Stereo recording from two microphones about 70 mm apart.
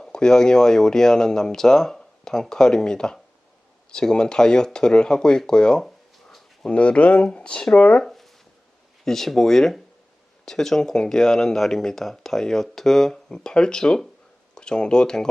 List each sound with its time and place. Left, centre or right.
0.0 s speech: centre
8.0 s a sound: centre
9.0 s speech: centre